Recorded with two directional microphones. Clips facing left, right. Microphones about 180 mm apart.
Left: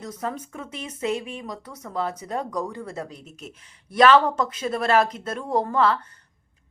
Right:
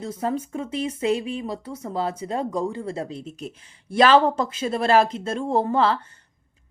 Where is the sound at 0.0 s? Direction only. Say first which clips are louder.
Right 5 dB; 30° right (ahead or behind).